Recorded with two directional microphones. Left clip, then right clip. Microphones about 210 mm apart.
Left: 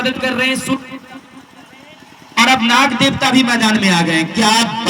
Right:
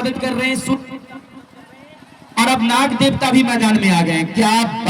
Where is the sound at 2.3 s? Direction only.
55° right (ahead or behind).